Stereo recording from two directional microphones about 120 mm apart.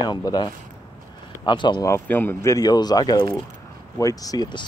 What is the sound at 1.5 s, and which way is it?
Speech, 40° left (ahead or behind).